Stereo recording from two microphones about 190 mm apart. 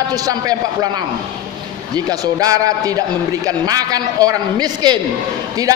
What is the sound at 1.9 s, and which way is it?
A man's voice, 20° right (ahead or behind).